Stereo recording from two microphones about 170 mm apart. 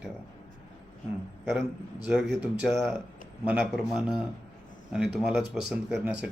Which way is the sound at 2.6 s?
Centre (ahead or behind).